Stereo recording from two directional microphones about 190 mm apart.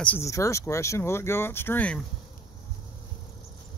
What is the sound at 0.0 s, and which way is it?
Speech, 10° left (ahead or behind).